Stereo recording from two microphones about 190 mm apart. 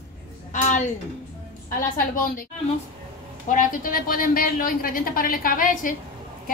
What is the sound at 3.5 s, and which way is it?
A woman's voice, 45° left (ahead or behind).